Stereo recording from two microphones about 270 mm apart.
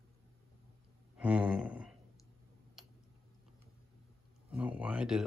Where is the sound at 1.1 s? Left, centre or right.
Centre.